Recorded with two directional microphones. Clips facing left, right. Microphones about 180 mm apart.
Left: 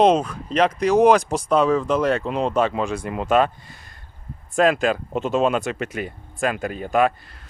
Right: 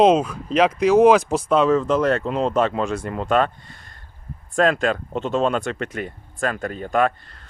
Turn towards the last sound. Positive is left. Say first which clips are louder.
# left 1 dB
turn(degrees=10)  # may be behind; listen again after turning